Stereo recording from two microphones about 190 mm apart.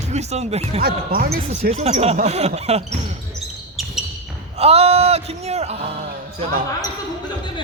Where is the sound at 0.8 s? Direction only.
50° right (ahead or behind).